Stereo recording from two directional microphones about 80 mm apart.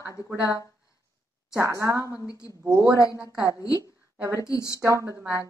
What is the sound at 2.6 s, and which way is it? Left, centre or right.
A woman's voice, right.